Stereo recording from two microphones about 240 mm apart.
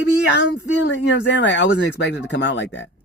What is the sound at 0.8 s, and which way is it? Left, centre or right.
Speech, left.